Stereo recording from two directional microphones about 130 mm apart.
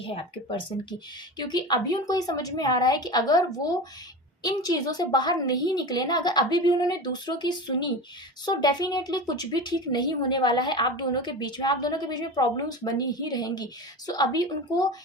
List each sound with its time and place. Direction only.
0.1 s a woman's voice: 40° left (ahead or behind)